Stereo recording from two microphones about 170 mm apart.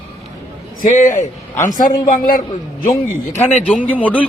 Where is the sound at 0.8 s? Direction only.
50° left (ahead or behind).